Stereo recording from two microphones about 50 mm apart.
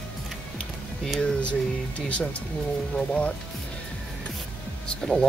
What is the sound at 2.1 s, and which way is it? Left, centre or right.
Speech, left.